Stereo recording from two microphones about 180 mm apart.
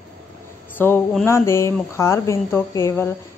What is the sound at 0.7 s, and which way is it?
A woman's voice, 10° left (ahead or behind).